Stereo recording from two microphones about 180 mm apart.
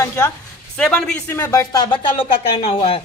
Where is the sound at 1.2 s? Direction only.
15° left (ahead or behind).